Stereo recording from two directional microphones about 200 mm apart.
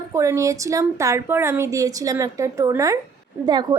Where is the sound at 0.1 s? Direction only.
15° right (ahead or behind).